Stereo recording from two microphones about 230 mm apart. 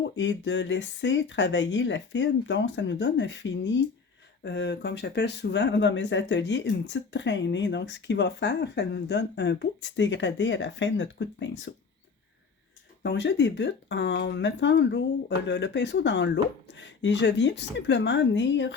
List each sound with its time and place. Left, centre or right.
0.0 s speech: left
13.0 s speech: left